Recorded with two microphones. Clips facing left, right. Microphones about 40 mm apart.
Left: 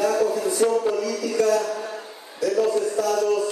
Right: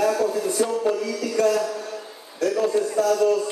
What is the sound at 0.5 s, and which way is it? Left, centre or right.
Music, left.